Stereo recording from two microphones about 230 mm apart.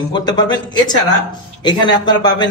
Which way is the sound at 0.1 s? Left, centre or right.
Centre.